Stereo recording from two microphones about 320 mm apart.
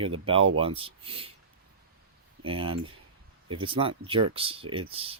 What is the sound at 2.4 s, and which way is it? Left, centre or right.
Speech, centre.